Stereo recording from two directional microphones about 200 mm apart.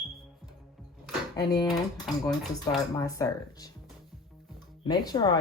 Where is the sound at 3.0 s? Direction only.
15° left (ahead or behind).